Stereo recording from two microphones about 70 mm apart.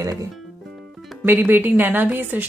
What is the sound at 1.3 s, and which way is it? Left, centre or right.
Speech, right.